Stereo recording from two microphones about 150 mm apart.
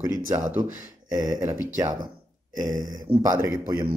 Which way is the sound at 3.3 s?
10° right (ahead or behind).